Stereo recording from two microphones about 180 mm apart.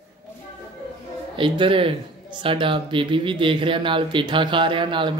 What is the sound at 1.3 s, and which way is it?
Speech, 30° right (ahead or behind).